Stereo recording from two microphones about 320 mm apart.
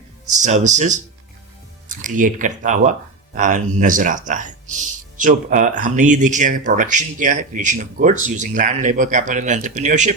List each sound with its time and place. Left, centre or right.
0.4 s speech: right